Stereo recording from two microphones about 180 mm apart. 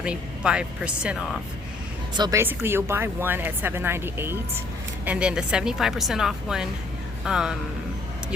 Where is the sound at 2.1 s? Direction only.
20° right (ahead or behind).